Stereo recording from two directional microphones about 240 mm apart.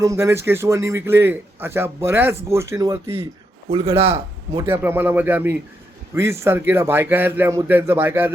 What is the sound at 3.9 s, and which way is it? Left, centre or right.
Speech, right.